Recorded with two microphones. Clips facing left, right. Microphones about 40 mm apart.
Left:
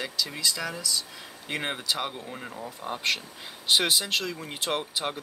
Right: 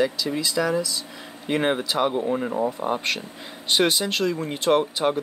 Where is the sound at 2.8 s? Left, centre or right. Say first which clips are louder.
Right 4 dB; right.